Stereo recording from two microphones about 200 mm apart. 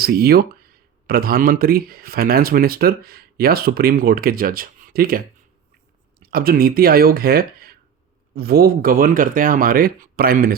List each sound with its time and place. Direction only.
0.0 s speech: 50° right (ahead or behind)